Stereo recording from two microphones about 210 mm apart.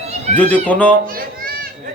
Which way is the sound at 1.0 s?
45° right (ahead or behind).